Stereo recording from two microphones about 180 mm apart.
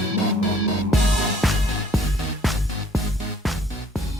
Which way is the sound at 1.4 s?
Centre (ahead or behind).